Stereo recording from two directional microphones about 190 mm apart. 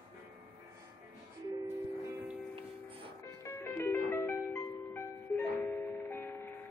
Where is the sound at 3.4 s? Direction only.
15° left (ahead or behind).